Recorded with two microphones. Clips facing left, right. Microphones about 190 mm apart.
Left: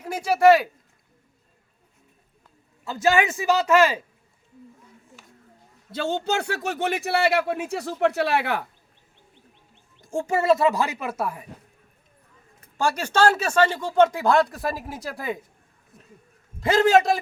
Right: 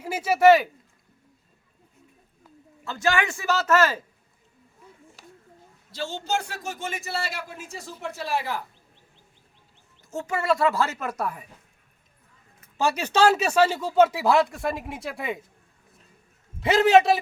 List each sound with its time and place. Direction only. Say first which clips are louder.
0.0 s speech: left 1 dB; 5° right (ahead or behind)
3.0 s a man's voice: left 4 dB; 20° left (ahead or behind)
6.0 s speech: left 4 dB; 60° left (ahead or behind)
10.2 s speech: left 4 dB; 25° left (ahead or behind); by 11.4 s 5° left (ahead or behind)
12.8 s speech: even; 10° right (ahead or behind)
16.6 s speech: even; centre (ahead or behind)